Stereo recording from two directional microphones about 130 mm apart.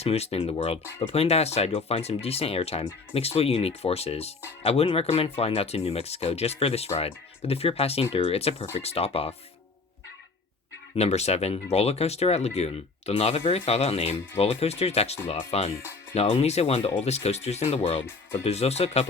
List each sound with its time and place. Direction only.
0.0 s speech: 50° left (ahead or behind)
10.9 s speech: 55° left (ahead or behind)
18.0 s speech: 15° left (ahead or behind)
18.4 s speech: 55° left (ahead or behind)